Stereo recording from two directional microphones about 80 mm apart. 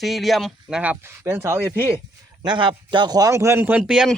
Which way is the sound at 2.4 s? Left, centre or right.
Right.